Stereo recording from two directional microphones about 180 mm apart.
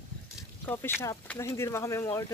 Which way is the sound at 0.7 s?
10° left (ahead or behind).